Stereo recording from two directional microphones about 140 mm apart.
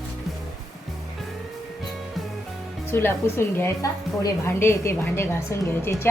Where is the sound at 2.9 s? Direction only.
15° left (ahead or behind).